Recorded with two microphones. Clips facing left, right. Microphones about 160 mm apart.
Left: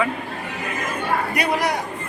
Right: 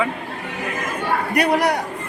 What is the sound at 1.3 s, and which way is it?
Speech, 65° right (ahead or behind).